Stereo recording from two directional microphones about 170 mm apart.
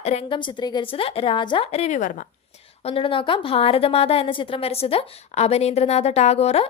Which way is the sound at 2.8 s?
30° left (ahead or behind).